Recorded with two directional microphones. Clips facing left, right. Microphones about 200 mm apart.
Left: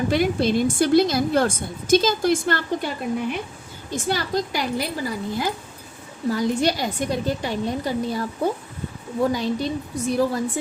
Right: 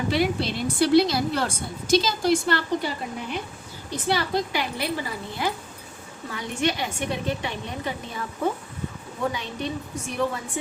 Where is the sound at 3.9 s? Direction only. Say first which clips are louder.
Left 1 dB; 45° left (ahead or behind).